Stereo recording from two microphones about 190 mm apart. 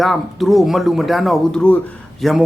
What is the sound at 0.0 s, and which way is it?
A man's voice, centre (ahead or behind).